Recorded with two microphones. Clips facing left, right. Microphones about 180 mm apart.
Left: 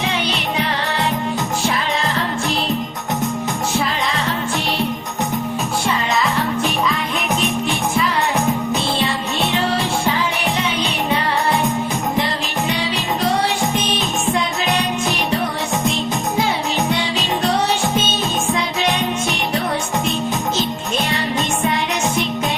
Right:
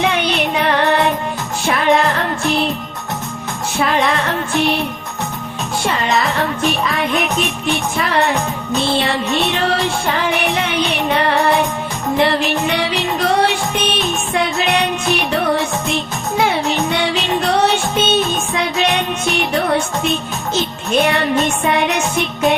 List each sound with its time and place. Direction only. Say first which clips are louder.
0.0 s music: right 5 dB; 60° right (ahead or behind)
3.8 s music: right 8 dB; 60° right (ahead or behind)
10.1 s music: right 2 dB; 60° right (ahead or behind)
16.9 s music: right 3 dB; 65° right (ahead or behind)
21.0 s music: right 8 dB; 60° right (ahead or behind)